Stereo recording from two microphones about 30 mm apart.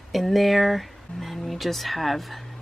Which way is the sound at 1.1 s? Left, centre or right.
Left.